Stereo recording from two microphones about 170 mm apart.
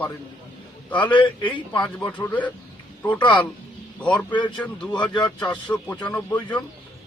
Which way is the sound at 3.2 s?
30° left (ahead or behind).